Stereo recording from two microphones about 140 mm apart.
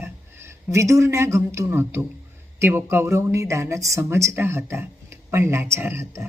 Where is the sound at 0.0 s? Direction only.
20° right (ahead or behind).